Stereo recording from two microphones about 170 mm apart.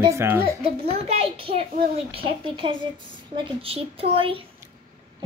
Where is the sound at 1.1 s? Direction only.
35° right (ahead or behind).